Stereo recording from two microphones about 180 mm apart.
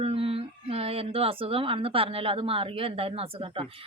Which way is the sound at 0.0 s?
30° right (ahead or behind).